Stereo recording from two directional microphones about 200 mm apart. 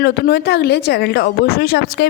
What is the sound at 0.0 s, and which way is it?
Speech, 50° left (ahead or behind).